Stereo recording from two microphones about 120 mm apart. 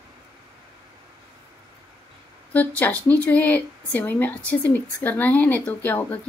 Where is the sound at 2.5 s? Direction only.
15° left (ahead or behind).